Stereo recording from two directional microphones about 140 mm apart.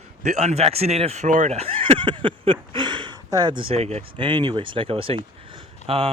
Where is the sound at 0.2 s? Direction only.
55° right (ahead or behind).